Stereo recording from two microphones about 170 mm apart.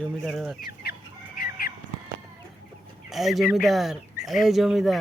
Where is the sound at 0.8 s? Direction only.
70° left (ahead or behind).